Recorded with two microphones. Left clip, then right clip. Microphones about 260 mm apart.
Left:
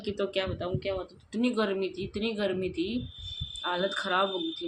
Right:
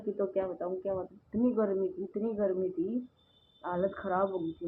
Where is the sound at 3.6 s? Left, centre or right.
Left.